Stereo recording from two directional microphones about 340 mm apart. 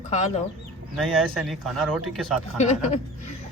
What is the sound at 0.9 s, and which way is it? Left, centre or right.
Speech, centre.